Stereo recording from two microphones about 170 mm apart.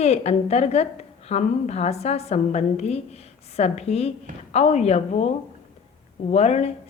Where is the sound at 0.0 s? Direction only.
40° left (ahead or behind).